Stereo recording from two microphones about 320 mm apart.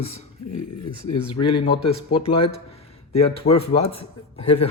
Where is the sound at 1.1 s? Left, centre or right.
Centre.